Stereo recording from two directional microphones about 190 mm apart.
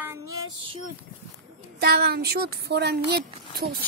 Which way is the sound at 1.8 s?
55° right (ahead or behind).